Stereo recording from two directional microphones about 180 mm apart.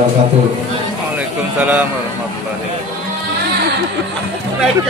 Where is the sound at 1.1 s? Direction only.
10° right (ahead or behind).